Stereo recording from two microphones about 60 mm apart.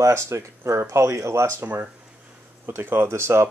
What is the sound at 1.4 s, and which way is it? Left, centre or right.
A man's voice, right.